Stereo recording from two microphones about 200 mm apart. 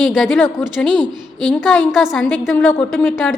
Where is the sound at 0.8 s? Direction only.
20° right (ahead or behind).